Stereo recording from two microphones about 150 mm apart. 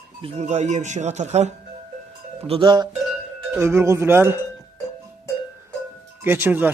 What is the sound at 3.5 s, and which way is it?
Speech, 20° right (ahead or behind).